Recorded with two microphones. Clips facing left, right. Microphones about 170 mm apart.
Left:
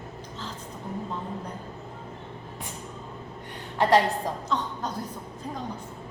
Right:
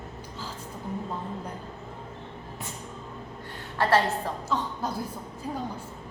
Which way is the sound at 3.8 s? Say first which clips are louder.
Left 2 dB; 20° left (ahead or behind).